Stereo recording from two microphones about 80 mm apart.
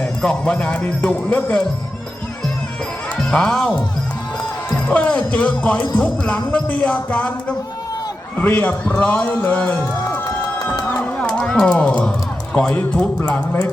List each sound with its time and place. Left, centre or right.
0.0 s speech: centre
3.2 s speech: centre
4.9 s a man's voice: centre
10.8 s music: centre
12.5 s a man's voice: centre